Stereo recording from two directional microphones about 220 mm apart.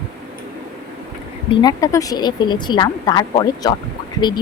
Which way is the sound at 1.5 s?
15° left (ahead or behind).